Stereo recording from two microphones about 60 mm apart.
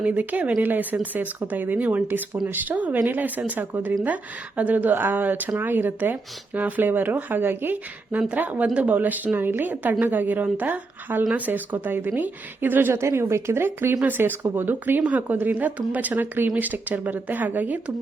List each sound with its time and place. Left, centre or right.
0.0 s speech: right
12.9 s speech: right
14.0 s speech: right